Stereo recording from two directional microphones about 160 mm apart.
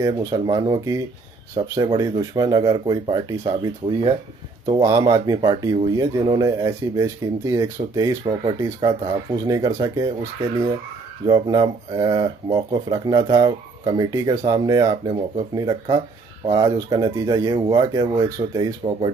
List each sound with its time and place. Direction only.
0.0 s speech: 20° right (ahead or behind)
4.7 s speech: 25° right (ahead or behind)